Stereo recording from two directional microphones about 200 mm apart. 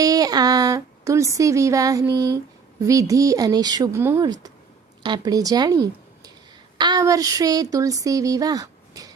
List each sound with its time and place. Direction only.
0.0 s speech: 20° right (ahead or behind)